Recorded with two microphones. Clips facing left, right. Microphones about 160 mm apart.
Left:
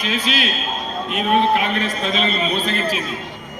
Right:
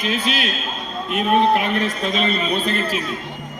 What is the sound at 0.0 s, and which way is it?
Speech, 50° right (ahead or behind).